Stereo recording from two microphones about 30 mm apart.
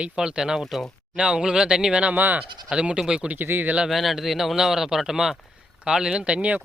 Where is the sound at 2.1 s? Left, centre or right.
Right.